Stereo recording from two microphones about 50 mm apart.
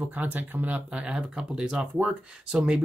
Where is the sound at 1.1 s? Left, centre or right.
Centre.